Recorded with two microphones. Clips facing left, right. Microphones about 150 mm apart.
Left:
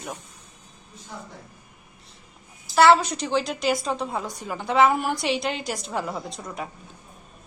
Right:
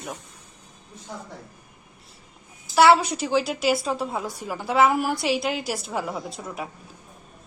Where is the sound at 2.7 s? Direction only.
10° right (ahead or behind).